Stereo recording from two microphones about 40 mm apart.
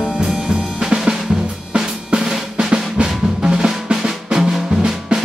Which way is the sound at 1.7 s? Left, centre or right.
Centre.